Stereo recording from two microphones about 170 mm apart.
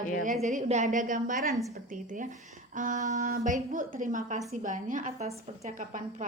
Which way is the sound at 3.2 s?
60° right (ahead or behind).